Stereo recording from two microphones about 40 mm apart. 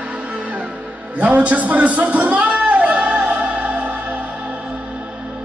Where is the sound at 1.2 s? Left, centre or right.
Right.